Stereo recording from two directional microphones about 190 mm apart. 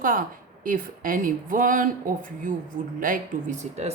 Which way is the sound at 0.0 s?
45° right (ahead or behind).